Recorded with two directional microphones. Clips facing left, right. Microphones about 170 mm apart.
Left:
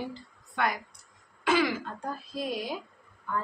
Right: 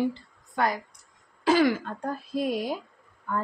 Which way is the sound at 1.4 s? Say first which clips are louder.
Right 4 dB; 35° right (ahead or behind).